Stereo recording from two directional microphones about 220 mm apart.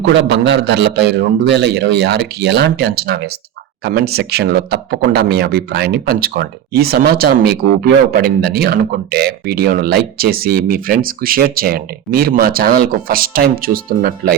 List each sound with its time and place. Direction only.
0.0 s speech: 50° right (ahead or behind)